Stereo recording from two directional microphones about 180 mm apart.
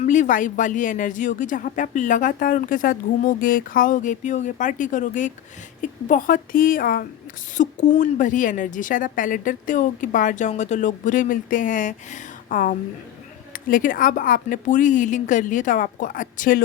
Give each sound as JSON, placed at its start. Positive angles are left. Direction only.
{"t": 0.0, "sound": "speech", "side_deg": 45}